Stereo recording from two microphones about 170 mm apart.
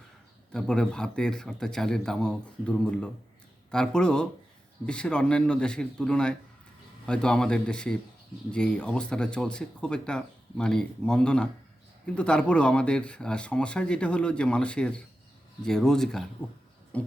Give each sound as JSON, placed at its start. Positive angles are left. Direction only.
{"t": 0.5, "sound": "speech", "side_deg": 5}
{"t": 16.9, "sound": "pig", "side_deg": 10}